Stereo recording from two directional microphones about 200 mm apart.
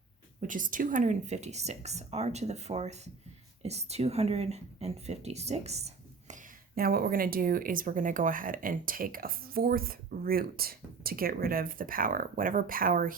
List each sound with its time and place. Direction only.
0.4 s speech: 40° right (ahead or behind)